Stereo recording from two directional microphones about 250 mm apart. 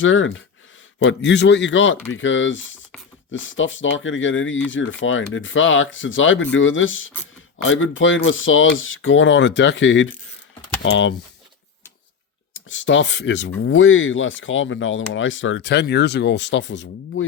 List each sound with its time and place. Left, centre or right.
0.0 s speech: left
12.6 s speech: left